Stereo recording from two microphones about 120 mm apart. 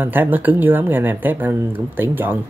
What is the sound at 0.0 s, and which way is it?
Speech, 15° right (ahead or behind).